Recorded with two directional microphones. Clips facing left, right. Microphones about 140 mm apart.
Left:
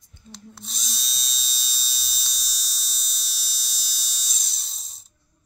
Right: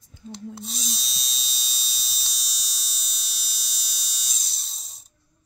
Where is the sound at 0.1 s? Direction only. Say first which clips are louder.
Right 9 dB; 90° right.